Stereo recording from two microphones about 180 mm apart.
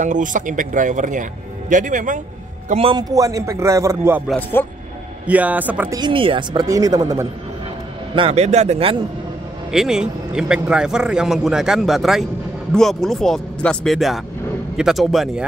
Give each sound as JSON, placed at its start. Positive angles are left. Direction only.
{"t": 0.0, "sound": "speech", "side_deg": -45}
{"t": 2.7, "sound": "a man's voice", "side_deg": -30}
{"t": 4.3, "sound": "a man's voice", "side_deg": 10}
{"t": 5.2, "sound": "a man's voice", "side_deg": -10}
{"t": 5.9, "sound": "speech", "side_deg": -25}
{"t": 8.1, "sound": "a man's voice", "side_deg": -30}
{"t": 9.7, "sound": "a man's voice", "side_deg": 0}